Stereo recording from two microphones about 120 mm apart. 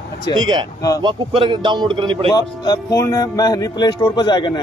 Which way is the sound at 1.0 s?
40° right (ahead or behind).